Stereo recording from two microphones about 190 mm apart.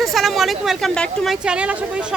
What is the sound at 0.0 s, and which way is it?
Speech, centre (ahead or behind).